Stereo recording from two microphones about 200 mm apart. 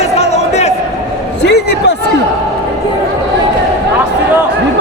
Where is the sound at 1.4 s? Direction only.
60° left (ahead or behind).